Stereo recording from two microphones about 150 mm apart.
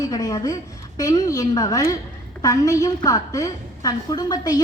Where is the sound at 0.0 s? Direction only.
25° left (ahead or behind).